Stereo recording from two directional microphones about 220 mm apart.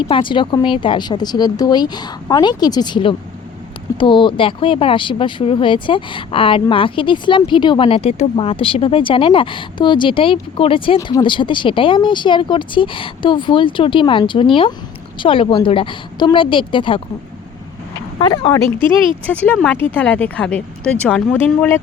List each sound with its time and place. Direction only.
0.1 s speech: 20° left (ahead or behind)
19.3 s speech: 5° left (ahead or behind)